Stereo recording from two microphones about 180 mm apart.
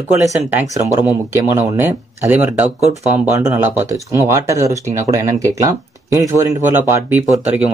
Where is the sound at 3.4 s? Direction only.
20° right (ahead or behind).